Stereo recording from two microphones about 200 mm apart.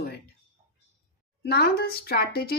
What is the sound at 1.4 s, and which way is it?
Speech, 50° left (ahead or behind).